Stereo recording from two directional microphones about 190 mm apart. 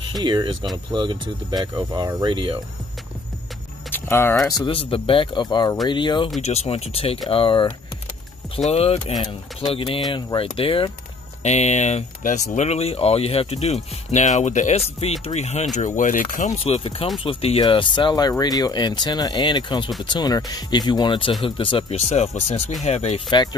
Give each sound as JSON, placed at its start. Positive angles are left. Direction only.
{"t": 0.1, "sound": "speech", "side_deg": -25}
{"t": 3.9, "sound": "speech", "side_deg": 10}